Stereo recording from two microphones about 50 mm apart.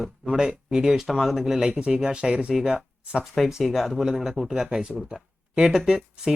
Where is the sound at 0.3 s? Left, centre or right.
Centre.